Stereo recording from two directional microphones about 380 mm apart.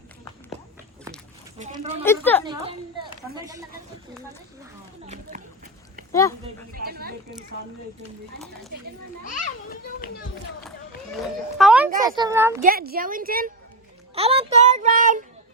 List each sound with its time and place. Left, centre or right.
1.5 s speech: centre
2.0 s speech: centre
2.5 s a sound: centre
5.0 s a sound: centre
6.1 s speech: centre
6.7 s speech: right
9.2 s a child's voice: left
11.5 s speech: centre
12.6 s speech: right